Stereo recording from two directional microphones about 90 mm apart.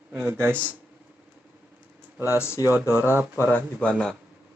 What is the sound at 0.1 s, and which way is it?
Speech, 25° right (ahead or behind).